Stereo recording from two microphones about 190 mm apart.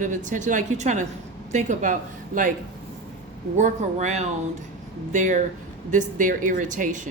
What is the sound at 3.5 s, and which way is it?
Speech, 40° right (ahead or behind).